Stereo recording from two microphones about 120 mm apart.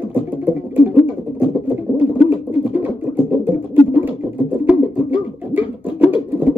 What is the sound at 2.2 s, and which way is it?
Bird, 15° right (ahead or behind).